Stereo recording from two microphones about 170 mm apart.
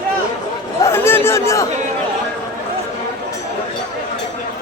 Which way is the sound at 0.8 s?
15° left (ahead or behind).